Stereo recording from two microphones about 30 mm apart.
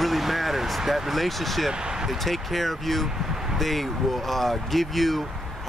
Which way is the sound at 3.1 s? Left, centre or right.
Centre.